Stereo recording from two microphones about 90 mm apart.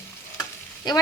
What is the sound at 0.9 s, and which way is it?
Stir, 50° left (ahead or behind).